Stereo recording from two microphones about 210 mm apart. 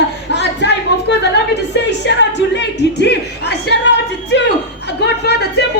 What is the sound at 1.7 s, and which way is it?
Music, 55° left (ahead or behind).